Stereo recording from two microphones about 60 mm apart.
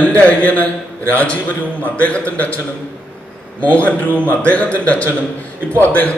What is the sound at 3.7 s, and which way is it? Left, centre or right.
A man's voice, left.